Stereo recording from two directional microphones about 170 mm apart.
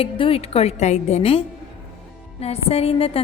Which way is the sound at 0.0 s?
35° left (ahead or behind).